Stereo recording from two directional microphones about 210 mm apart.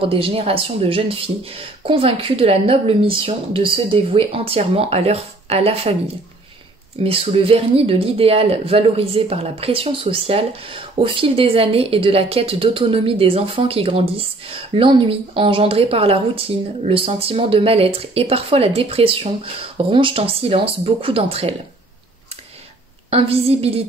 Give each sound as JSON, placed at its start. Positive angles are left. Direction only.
{"t": 0.0, "sound": "speech", "side_deg": -25}
{"t": 7.0, "sound": "speech", "side_deg": -25}
{"t": 23.0, "sound": "speech", "side_deg": -30}